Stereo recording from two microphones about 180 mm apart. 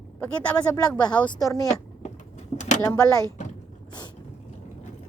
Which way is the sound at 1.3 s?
20° left (ahead or behind).